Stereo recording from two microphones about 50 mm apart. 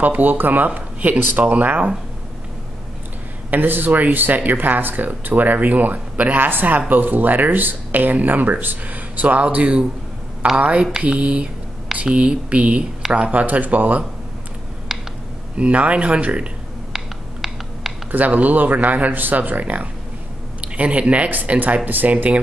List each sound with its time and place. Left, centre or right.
0.0 s speech: right
3.4 s speech: right
15.5 s speech: right
16.9 s a sound: centre
18.1 s speech: right